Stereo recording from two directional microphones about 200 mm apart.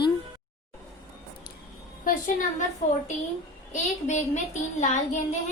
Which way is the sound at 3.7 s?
35° left (ahead or behind).